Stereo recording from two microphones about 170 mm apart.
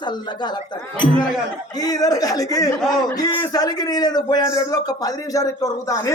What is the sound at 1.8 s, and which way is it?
A man's voice, 20° left (ahead or behind).